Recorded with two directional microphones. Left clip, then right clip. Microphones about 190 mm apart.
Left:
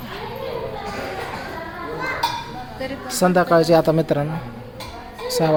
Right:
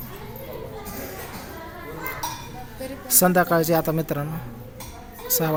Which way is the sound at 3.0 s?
15° right (ahead or behind).